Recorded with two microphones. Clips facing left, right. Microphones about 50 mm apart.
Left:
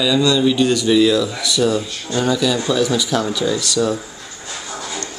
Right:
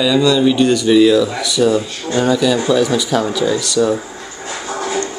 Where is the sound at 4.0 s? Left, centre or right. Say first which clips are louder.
Right 5 dB; right.